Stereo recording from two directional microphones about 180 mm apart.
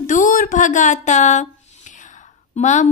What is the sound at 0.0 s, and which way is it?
Speech, 45° left (ahead or behind).